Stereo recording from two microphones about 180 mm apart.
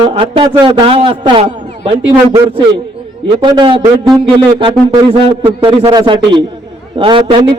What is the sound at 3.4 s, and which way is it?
A man's voice, 25° right (ahead or behind).